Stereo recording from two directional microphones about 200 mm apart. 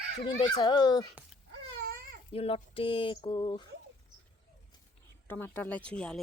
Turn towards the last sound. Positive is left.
turn(degrees=5)  # may be behind; listen again after turning